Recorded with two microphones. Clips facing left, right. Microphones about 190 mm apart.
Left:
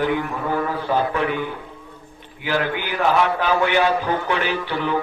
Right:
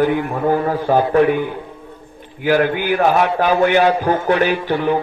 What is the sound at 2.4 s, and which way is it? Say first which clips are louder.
A man's voice: right 7 dB; 45° right (ahead or behind).